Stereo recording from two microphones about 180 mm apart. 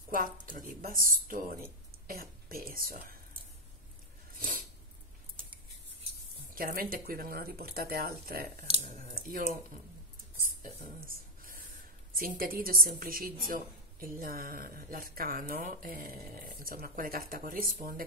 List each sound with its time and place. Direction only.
0.1 s a woman's voice: 50° right (ahead or behind)
4.3 s a sound: 50° right (ahead or behind)
6.5 s speech: 55° right (ahead or behind)
8.6 s speech: 35° right (ahead or behind)
8.9 s a sound: 50° right (ahead or behind)
12.2 s a woman's voice: 55° right (ahead or behind)